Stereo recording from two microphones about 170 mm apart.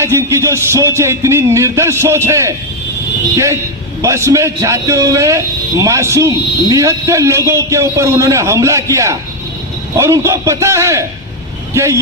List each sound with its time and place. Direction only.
0.0 s a man's voice: 15° right (ahead or behind)